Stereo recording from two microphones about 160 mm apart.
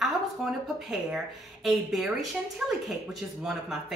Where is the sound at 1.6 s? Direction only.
Centre (ahead or behind).